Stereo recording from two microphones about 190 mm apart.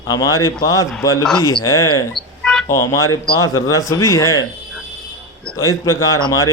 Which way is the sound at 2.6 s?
15° left (ahead or behind).